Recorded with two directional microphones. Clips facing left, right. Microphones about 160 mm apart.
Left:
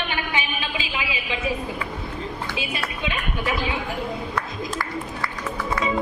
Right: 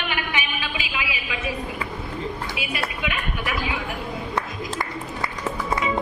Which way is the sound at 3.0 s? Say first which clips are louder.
Left 1 dB; 30° left (ahead or behind).